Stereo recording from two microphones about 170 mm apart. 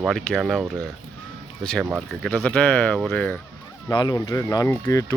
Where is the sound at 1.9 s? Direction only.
5° left (ahead or behind).